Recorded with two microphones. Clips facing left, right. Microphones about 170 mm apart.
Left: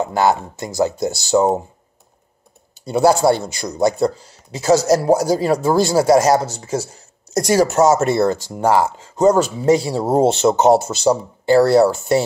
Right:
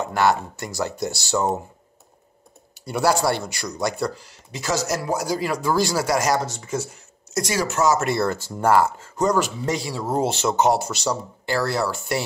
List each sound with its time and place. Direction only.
0.1 s speech: 20° left (ahead or behind)
2.8 s speech: 25° left (ahead or behind)